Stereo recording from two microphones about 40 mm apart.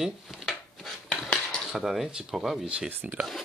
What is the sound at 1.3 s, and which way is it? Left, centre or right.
Cutlery, left.